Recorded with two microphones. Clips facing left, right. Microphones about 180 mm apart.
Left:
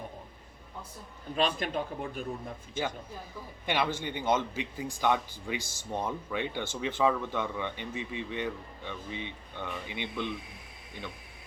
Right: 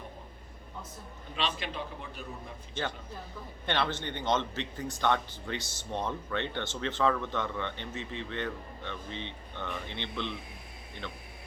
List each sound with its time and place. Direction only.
1.4 s a man's voice: 45° left (ahead or behind)
2.7 s speech: 10° left (ahead or behind)